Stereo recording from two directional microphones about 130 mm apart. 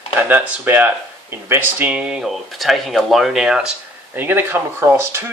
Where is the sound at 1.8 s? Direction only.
10° right (ahead or behind).